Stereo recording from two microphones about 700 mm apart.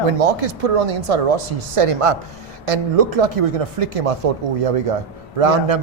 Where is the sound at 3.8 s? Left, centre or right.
Right.